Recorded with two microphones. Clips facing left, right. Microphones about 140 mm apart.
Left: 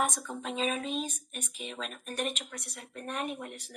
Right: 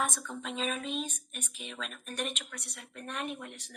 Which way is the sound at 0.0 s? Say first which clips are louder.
Left 3 dB; 35° left (ahead or behind).